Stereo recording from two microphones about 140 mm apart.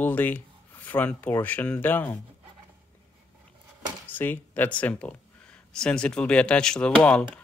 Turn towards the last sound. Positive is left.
turn(degrees=10)  # may be behind; listen again after turning